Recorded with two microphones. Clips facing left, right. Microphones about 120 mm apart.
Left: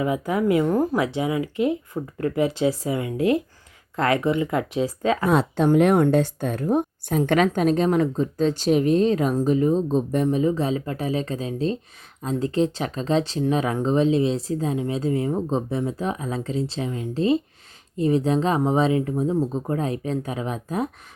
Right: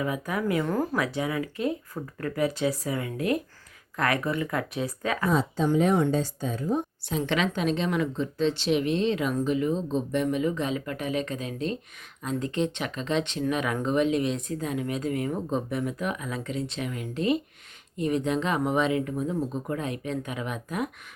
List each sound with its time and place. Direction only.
0.0 s speech: 20° left (ahead or behind)
5.3 s speech: 70° left (ahead or behind); by 20.9 s 30° left (ahead or behind)